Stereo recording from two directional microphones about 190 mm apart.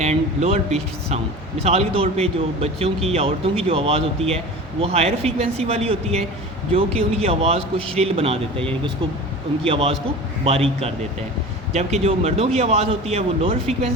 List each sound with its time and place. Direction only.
0.0 s speech: 35° right (ahead or behind)
9.6 s speech: 30° right (ahead or behind)